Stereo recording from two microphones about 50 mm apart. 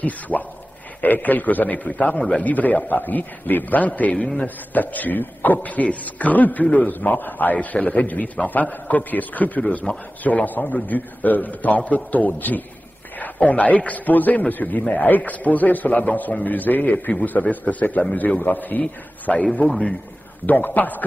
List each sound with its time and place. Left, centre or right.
0.3 s speech: centre
1.0 s a man's voice: left
2.4 s a man's voice: left
7.5 s a man's voice: left
18.8 s a man's voice: left
20.4 s a man's voice: left